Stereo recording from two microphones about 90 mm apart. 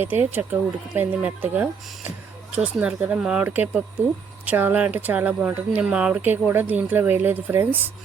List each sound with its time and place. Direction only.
0.0 s speech: 20° right (ahead or behind)
3.4 s speech: 20° right (ahead or behind)